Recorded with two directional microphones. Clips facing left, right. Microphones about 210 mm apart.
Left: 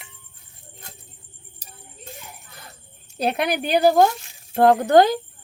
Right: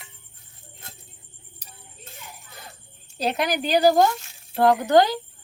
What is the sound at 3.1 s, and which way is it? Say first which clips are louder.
A woman's voice: left 2 dB; 55° left (ahead or behind).